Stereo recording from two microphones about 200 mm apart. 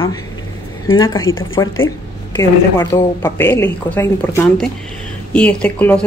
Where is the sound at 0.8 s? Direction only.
20° left (ahead or behind).